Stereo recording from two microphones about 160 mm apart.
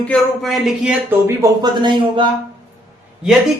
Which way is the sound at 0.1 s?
Centre (ahead or behind).